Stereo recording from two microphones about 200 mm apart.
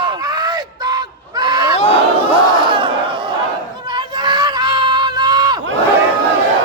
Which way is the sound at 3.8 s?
20° right (ahead or behind).